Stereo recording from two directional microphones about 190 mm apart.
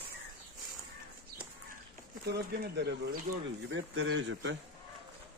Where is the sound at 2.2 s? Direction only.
60° right (ahead or behind).